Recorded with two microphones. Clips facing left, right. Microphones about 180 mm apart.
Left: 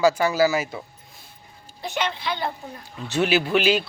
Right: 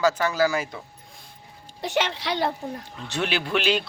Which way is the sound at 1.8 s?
80° right.